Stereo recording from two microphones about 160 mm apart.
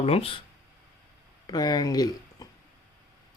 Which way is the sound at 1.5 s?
25° left (ahead or behind).